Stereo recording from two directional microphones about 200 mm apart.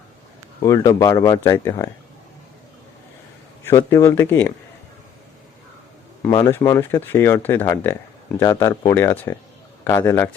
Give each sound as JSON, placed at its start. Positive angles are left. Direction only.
{"t": 0.6, "sound": "speech", "side_deg": 15}
{"t": 3.6, "sound": "speech", "side_deg": 15}
{"t": 6.2, "sound": "speech", "side_deg": 15}